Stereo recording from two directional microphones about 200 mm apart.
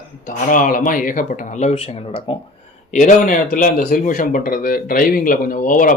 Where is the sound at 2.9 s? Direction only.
40° left (ahead or behind).